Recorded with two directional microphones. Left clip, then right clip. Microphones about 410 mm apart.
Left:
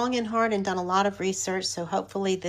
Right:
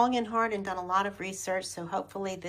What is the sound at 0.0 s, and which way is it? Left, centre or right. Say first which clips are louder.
A woman's voice: left 1 dB; centre.